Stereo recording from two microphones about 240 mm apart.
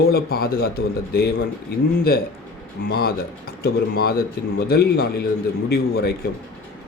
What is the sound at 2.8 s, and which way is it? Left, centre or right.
A man's voice, left.